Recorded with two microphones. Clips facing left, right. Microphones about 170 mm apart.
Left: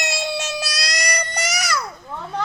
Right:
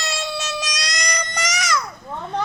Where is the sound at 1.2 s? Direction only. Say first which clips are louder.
Even; 40° left (ahead or behind).